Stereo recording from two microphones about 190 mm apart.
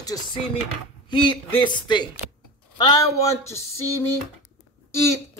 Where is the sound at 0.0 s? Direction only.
20° left (ahead or behind).